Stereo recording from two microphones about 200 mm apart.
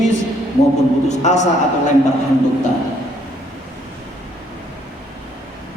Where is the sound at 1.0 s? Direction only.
35° left (ahead or behind).